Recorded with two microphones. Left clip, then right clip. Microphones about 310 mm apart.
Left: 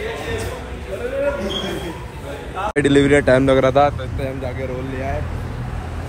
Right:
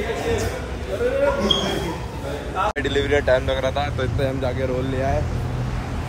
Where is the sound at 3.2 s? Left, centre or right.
Left.